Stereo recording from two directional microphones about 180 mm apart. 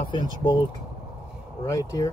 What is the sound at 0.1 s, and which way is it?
Speech, 25° left (ahead or behind).